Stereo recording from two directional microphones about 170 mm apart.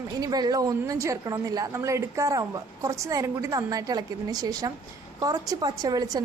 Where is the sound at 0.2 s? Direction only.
25° right (ahead or behind).